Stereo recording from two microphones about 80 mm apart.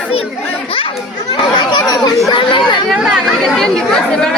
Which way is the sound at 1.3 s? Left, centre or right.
Left.